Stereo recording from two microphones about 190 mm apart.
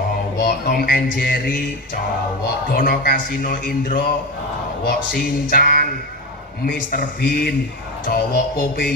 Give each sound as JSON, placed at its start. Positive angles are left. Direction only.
{"t": 0.4, "sound": "music", "side_deg": 50}
{"t": 2.7, "sound": "music", "side_deg": 50}